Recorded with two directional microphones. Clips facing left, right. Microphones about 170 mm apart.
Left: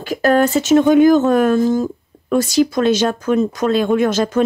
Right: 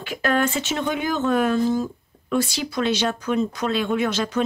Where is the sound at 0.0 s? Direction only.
40° left (ahead or behind).